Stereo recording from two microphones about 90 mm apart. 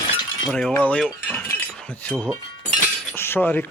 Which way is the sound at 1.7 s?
10° left (ahead or behind).